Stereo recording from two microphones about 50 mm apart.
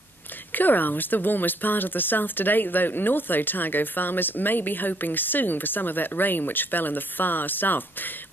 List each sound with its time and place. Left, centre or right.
0.5 s speech: left